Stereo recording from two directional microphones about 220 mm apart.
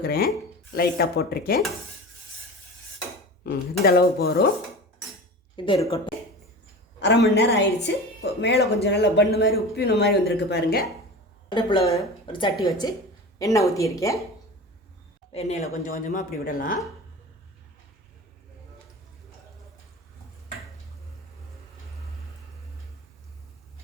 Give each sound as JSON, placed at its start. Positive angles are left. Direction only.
{"t": 0.0, "sound": "a woman's voice", "side_deg": 45}
{"t": 3.4, "sound": "a woman's voice", "side_deg": 45}
{"t": 5.6, "sound": "a woman's voice", "side_deg": 20}
{"t": 7.0, "sound": "a woman's voice", "side_deg": 50}
{"t": 11.4, "sound": "a woman's voice", "side_deg": 20}
{"t": 15.3, "sound": "a woman's voice", "side_deg": 30}
{"t": 15.9, "sound": "speech", "side_deg": 40}